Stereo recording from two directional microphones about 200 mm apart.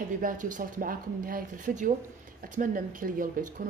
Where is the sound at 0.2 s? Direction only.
40° right (ahead or behind).